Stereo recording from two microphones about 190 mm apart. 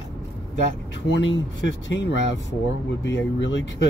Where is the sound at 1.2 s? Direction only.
75° left (ahead or behind).